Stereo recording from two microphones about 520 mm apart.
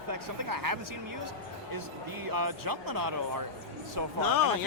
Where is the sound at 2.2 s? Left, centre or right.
Right.